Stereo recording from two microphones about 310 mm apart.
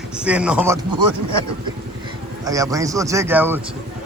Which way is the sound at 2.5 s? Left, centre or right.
Centre.